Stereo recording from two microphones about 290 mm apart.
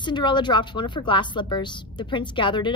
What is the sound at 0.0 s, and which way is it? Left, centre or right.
A woman's voice, centre.